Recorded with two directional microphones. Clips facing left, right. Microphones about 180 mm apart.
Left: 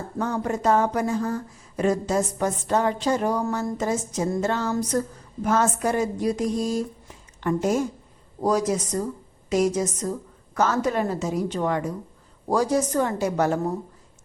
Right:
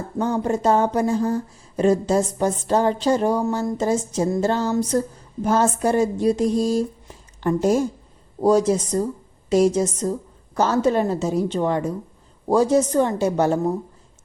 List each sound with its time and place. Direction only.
0.2 s speech: 30° right (ahead or behind)